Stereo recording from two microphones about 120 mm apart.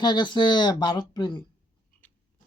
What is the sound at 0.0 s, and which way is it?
Speech, 40° left (ahead or behind).